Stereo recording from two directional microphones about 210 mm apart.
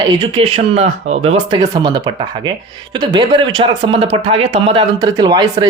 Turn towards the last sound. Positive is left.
turn(degrees=-20)  # may be behind; listen again after turning